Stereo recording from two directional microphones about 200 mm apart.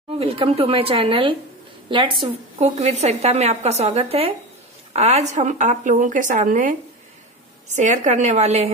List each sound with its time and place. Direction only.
0.2 s a woman's voice: 30° right (ahead or behind)